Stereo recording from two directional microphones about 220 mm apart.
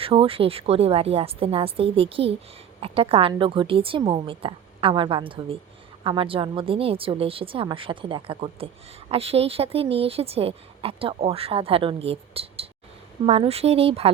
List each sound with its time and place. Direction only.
0.0 s a woman's voice: 25° right (ahead or behind)